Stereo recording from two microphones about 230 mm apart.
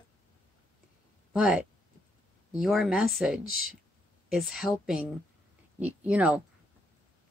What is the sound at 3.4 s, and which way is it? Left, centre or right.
Speech, left.